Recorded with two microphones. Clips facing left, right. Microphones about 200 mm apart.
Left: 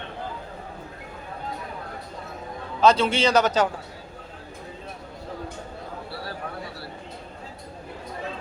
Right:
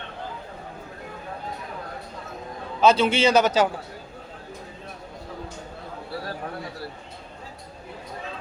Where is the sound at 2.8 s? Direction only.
5° right (ahead or behind).